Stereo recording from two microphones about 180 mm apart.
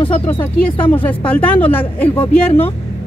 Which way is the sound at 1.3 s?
10° left (ahead or behind).